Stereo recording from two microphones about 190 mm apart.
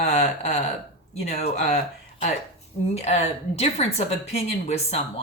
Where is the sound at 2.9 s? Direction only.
35° left (ahead or behind).